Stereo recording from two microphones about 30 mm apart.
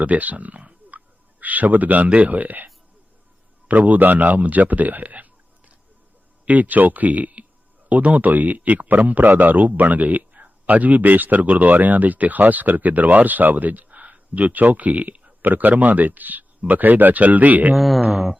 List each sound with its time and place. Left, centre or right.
0.0 s a man's voice: right
0.9 s a sound: right
2.0 s a man's voice: right
3.7 s a man's voice: right
6.5 s a man's voice: right
15.4 s speech: right
17.7 s speech: centre
18.1 s music: centre